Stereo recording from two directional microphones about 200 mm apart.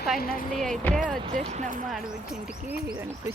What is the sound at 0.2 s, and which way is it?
Speech, 45° left (ahead or behind).